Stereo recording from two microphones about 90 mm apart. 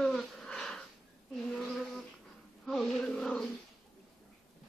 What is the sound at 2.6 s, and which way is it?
Chant, 5° left (ahead or behind).